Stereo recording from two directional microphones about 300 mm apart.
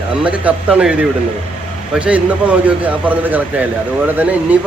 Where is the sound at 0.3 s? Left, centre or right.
Centre.